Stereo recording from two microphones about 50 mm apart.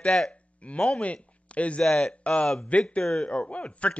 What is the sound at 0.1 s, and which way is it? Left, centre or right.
Speech, centre.